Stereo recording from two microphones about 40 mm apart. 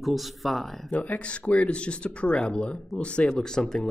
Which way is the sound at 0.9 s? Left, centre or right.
Left.